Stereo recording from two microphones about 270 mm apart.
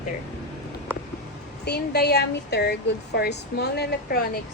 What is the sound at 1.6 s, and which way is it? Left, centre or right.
Speech, left.